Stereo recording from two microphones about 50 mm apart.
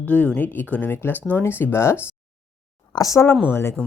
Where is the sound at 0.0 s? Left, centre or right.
Left.